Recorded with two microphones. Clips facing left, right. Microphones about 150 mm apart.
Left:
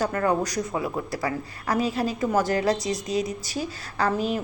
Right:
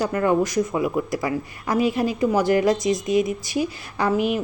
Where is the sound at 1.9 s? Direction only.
35° left (ahead or behind).